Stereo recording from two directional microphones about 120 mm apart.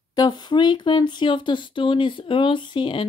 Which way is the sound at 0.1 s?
35° left (ahead or behind).